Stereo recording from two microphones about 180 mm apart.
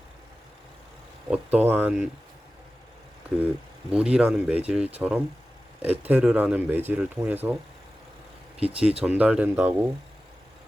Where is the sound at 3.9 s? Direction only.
5° right (ahead or behind).